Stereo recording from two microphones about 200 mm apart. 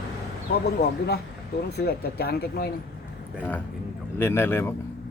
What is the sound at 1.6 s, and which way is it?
Speech, 55° left (ahead or behind).